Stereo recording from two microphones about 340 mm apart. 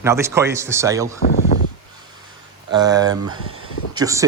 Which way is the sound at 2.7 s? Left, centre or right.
Centre.